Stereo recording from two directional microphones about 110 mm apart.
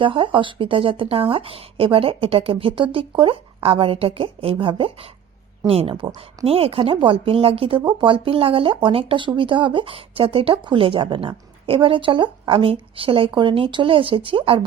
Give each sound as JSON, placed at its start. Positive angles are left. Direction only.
{"t": 0.0, "sound": "speech", "side_deg": -50}
{"t": 7.8, "sound": "speech", "side_deg": -45}